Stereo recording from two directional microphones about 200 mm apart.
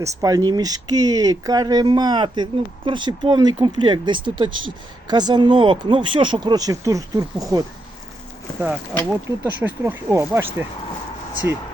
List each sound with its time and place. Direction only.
0.0 s speech: 20° right (ahead or behind)
9.0 s speech: 10° right (ahead or behind)